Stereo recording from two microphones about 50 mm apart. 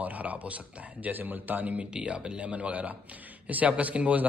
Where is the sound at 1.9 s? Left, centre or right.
Centre.